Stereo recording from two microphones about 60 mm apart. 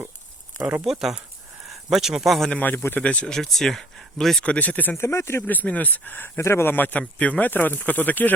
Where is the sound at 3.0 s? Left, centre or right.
Left.